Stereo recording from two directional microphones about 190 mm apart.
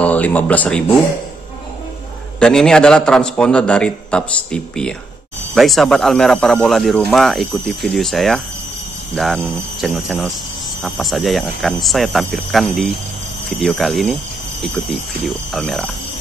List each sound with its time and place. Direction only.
0.0 s speech: 10° left (ahead or behind)
2.4 s speech: 5° left (ahead or behind)